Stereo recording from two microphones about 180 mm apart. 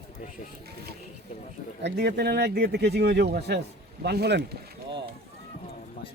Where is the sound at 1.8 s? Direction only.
70° right (ahead or behind).